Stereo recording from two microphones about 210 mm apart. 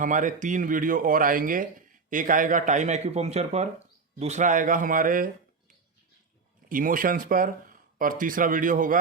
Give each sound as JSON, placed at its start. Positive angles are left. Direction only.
{"t": 0.0, "sound": "speech", "side_deg": -40}
{"t": 6.7, "sound": "speech", "side_deg": -40}